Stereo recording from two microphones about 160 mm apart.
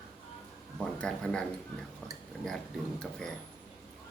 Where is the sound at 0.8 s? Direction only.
5° left (ahead or behind).